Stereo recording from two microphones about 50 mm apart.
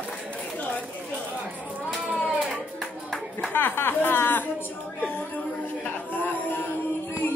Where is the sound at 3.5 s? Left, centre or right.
Left.